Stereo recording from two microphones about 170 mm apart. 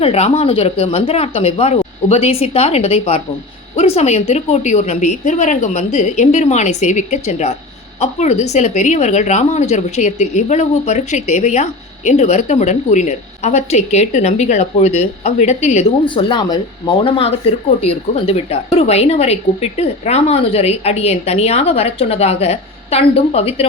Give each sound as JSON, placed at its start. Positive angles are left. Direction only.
{"t": 0.0, "sound": "a woman's voice", "side_deg": 40}
{"t": 16.0, "sound": "speech", "side_deg": 25}